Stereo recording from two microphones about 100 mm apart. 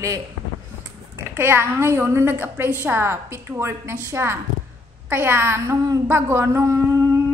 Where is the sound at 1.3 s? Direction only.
25° right (ahead or behind).